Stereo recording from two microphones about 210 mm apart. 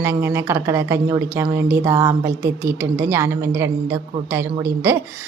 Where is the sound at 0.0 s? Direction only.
10° right (ahead or behind).